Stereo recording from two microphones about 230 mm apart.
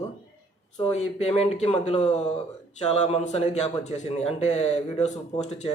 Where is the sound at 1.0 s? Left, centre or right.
Left.